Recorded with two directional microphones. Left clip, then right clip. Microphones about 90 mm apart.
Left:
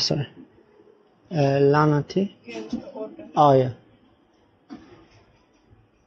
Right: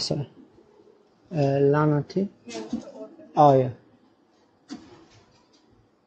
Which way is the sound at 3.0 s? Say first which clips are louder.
Left 7 dB; 10° left (ahead or behind).